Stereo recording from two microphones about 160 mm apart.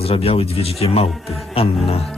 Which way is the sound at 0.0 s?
40° left (ahead or behind).